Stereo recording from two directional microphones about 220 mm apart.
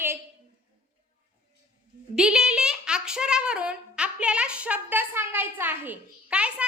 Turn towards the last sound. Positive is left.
turn(degrees=-5)  # may be behind; listen again after turning